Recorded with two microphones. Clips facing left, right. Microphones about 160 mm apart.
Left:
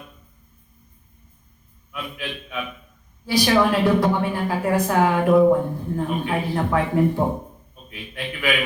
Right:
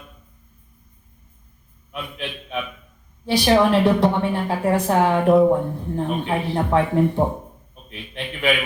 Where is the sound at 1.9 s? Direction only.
25° right (ahead or behind).